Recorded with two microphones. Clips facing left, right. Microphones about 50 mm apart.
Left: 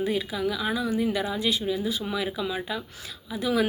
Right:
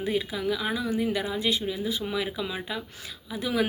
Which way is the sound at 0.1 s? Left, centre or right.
Right.